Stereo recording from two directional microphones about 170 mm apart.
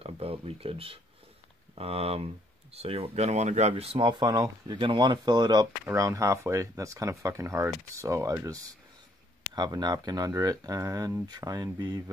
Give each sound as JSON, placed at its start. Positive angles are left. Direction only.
{"t": 0.0, "sound": "speech", "side_deg": -35}